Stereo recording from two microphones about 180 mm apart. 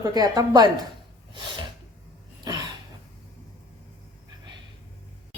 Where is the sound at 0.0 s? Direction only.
20° right (ahead or behind).